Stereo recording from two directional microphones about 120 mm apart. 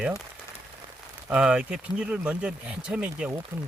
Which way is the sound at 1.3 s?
10° right (ahead or behind).